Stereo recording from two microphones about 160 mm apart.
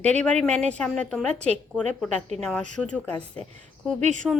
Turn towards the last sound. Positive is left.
turn(degrees=-50)  # may be behind; listen again after turning